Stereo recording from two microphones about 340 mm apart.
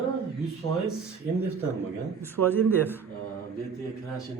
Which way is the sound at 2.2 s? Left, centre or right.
Centre.